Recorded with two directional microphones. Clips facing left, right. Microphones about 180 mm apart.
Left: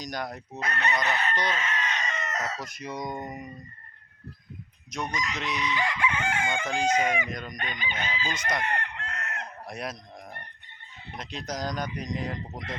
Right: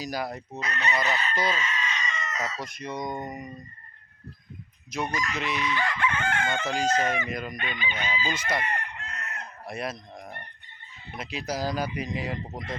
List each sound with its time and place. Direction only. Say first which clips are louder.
0.0 s speech: right 3 dB; 5° right (ahead or behind)
0.6 s speech: even; 60° left (ahead or behind)
1.5 s chicken: left 1 dB; 60° left (ahead or behind)
2.6 s speech: right 2 dB; centre (ahead or behind)
4.9 s speech: right 2 dB; 5° right (ahead or behind)
5.6 s chicken: left 1 dB; 15° left (ahead or behind)
6.7 s speech: even; 5° right (ahead or behind)
6.9 s chicken: even; 10° left (ahead or behind)
7.3 s speech: right 3 dB; 5° right (ahead or behind)
7.5 s chicken: right 2 dB; 45° left (ahead or behind)
8.0 s speech: right 2 dB; 5° right (ahead or behind)
8.6 s chicken: left 1 dB; 75° left (ahead or behind)
9.6 s goose: right 5 dB; centre (ahead or behind)
11.1 s speech: right 3 dB; 5° right (ahead or behind)